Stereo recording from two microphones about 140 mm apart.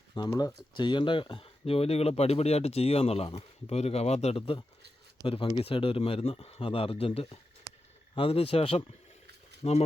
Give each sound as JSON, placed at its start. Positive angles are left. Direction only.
{"t": 0.1, "sound": "speech", "side_deg": 30}
{"t": 9.6, "sound": "speech", "side_deg": 50}